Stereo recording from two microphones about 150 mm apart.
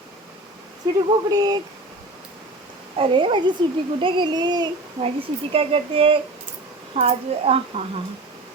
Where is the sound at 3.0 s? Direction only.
35° right (ahead or behind).